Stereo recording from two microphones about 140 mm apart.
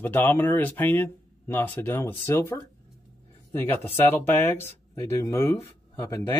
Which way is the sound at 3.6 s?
15° left (ahead or behind).